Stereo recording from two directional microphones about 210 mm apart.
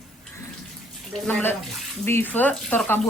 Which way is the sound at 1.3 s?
10° left (ahead or behind).